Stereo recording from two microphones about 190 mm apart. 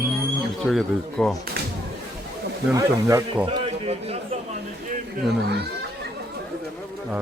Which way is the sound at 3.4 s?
30° right (ahead or behind).